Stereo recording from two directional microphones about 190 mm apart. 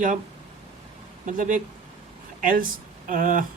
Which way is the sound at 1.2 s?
45° right (ahead or behind).